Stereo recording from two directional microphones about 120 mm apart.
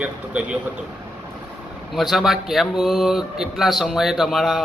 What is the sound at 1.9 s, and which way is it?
Speech, centre (ahead or behind).